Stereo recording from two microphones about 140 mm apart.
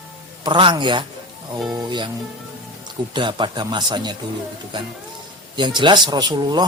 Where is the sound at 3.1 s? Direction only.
35° right (ahead or behind).